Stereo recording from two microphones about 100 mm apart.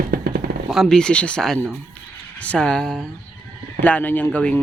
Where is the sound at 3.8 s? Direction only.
15° left (ahead or behind).